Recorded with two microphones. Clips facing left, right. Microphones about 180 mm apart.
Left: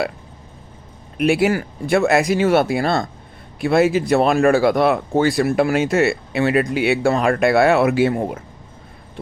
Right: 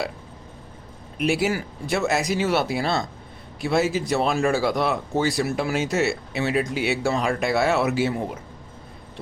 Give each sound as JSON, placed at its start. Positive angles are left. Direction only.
{"t": 1.2, "sound": "speech", "side_deg": 60}